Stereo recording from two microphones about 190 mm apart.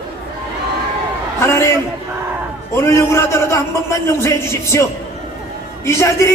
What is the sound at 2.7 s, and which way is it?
A man's voice, 15° left (ahead or behind).